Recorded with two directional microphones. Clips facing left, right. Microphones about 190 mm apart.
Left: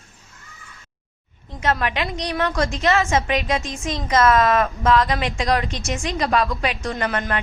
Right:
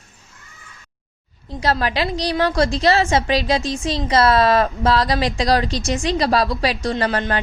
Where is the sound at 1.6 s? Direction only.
35° right (ahead or behind).